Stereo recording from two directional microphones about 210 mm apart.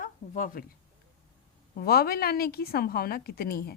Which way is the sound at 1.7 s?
45° left (ahead or behind).